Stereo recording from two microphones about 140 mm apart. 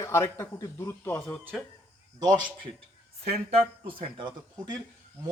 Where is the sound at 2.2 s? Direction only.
25° right (ahead or behind).